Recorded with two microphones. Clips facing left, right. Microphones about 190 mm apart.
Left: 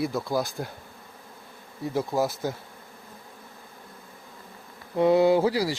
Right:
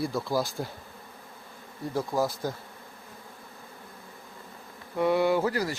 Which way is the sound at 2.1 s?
Centre (ahead or behind).